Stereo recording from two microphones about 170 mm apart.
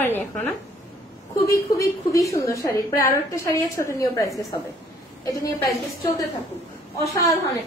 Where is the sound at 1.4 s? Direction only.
20° left (ahead or behind).